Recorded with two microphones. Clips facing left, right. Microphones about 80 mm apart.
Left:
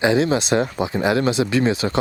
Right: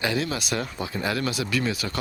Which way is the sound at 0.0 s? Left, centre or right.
Left.